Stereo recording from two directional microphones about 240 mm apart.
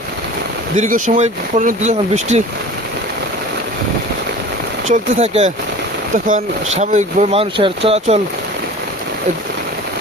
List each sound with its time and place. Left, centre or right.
0.8 s speech: right
4.9 s speech: right